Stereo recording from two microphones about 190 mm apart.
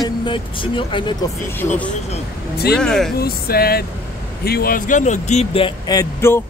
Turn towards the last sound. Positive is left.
turn(degrees=15)  # may be behind; listen again after turning